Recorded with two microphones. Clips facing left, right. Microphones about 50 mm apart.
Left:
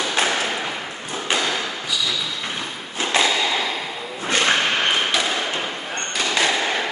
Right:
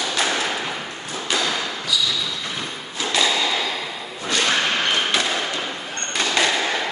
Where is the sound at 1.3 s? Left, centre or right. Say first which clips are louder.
Even; left.